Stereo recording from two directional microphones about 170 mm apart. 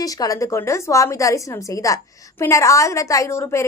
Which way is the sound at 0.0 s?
20° left (ahead or behind).